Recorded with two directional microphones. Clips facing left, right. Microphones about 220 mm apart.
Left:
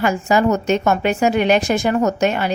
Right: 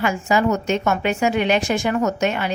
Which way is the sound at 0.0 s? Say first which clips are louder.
Left 3 dB; 40° left (ahead or behind).